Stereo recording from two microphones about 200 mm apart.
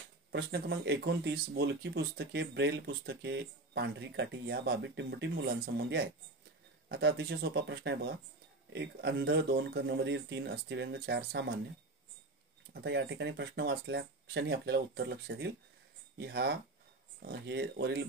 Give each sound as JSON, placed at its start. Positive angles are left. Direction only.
{"t": 0.3, "sound": "speech", "side_deg": -55}
{"t": 12.7, "sound": "speech", "side_deg": -60}